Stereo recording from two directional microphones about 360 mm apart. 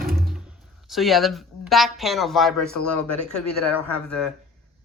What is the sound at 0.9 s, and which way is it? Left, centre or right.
Speech, centre.